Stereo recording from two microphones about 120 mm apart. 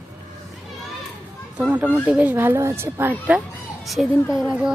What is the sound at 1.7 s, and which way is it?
A woman's voice, 10° right (ahead or behind).